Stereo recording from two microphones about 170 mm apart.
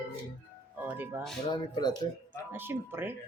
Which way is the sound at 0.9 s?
10° right (ahead or behind).